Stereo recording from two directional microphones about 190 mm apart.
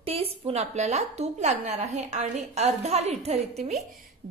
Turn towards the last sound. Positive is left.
turn(degrees=-35)  # may be behind; listen again after turning